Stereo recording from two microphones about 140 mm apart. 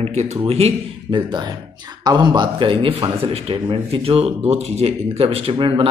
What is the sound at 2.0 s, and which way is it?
A man's voice, 30° right (ahead or behind).